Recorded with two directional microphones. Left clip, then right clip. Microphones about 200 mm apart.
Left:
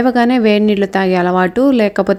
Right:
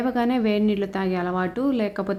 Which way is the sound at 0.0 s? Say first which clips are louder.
Left 11 dB; 30° left (ahead or behind).